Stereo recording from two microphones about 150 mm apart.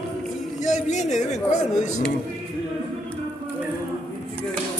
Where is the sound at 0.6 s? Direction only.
50° left (ahead or behind).